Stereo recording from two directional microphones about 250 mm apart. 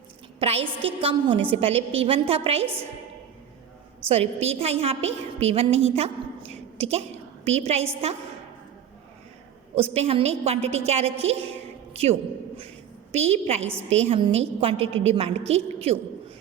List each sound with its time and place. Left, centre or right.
0.3 s a woman's voice: right
4.1 s a woman's voice: right
6.5 s a sound: right
7.4 s a woman's voice: right
9.7 s a woman's voice: right
13.1 s a woman's voice: right